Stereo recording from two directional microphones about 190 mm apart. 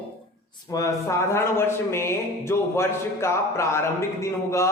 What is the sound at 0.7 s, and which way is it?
A man's voice, 15° left (ahead or behind).